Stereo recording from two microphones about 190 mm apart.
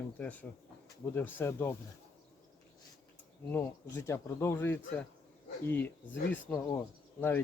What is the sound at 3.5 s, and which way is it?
Speech, 10° left (ahead or behind).